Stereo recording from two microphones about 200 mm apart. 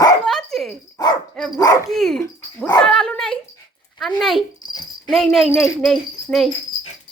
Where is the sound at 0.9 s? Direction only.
20° left (ahead or behind).